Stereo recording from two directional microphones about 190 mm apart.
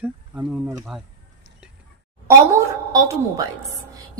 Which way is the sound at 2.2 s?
15° right (ahead or behind).